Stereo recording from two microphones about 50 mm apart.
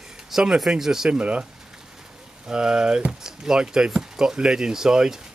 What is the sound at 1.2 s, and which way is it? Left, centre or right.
Speech, right.